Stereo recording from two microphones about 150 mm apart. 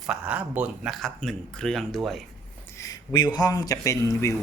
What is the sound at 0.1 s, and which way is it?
Speech, 10° right (ahead or behind).